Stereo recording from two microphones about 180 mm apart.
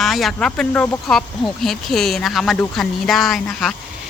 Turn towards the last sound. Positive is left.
turn(degrees=0)  # may be behind; listen again after turning